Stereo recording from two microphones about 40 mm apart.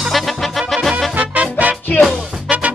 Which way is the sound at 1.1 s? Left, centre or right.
Right.